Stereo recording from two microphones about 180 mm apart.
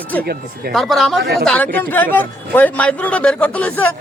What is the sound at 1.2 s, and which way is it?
Speech, 60° right (ahead or behind).